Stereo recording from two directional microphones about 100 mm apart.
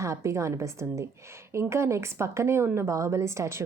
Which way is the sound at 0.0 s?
30° right (ahead or behind).